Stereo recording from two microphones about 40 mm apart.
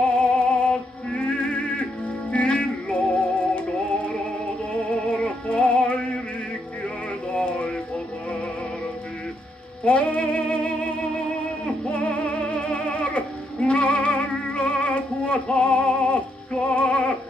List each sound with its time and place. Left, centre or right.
0.2 s music: left
4.9 s music: left
9.8 s music: left